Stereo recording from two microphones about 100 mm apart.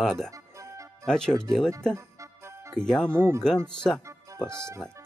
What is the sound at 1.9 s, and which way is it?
Music, 30° right (ahead or behind).